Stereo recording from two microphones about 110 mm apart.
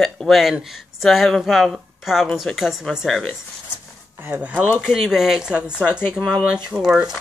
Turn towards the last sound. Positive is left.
turn(degrees=-5)  # may be behind; listen again after turning